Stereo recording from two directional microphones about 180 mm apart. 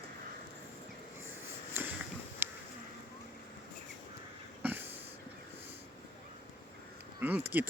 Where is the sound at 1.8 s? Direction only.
10° right (ahead or behind).